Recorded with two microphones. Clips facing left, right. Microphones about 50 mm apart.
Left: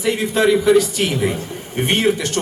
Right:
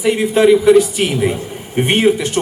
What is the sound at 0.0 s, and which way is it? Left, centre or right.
A man's voice, centre.